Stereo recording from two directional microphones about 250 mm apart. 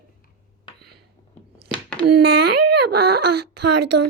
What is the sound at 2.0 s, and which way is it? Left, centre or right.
A child's voice, right.